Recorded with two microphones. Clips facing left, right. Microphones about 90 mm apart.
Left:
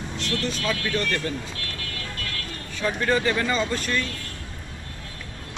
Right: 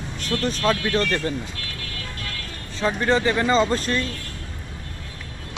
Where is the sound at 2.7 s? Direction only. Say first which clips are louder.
Right 3 dB; 25° right (ahead or behind).